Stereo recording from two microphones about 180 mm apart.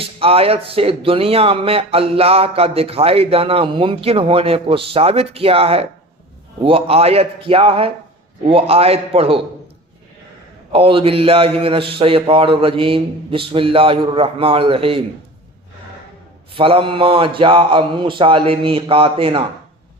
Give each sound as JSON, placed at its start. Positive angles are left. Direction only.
{"t": 0.0, "sound": "speech", "side_deg": -30}
{"t": 10.7, "sound": "speech", "side_deg": -30}
{"t": 16.6, "sound": "speech", "side_deg": -30}